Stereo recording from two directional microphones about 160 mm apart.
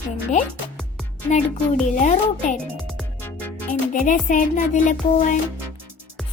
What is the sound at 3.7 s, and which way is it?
Music, 55° left (ahead or behind).